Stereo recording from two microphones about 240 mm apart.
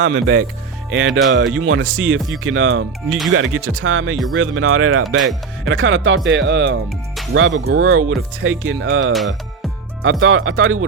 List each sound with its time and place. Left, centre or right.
0.0 s speech: right